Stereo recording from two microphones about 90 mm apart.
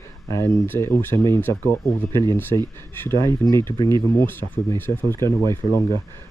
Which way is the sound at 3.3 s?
50° right (ahead or behind).